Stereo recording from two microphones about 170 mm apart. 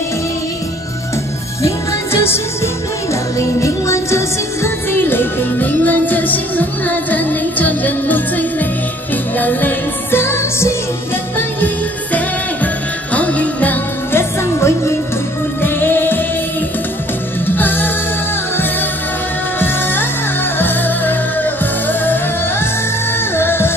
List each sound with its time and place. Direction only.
3.3 s music: 15° left (ahead or behind)
13.1 s jingle bell: 10° left (ahead or behind)
15.6 s music: 10° left (ahead or behind)
17.5 s music: 10° left (ahead or behind)
19.6 s music: 10° left (ahead or behind)